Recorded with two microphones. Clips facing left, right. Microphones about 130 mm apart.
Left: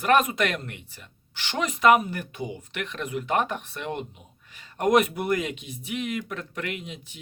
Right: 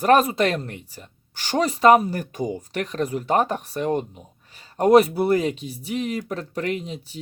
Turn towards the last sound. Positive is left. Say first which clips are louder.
# right 8 dB
turn(degrees=-35)  # may be behind; listen again after turning